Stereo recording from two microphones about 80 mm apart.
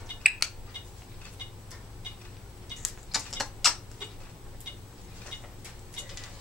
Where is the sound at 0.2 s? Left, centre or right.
Centre.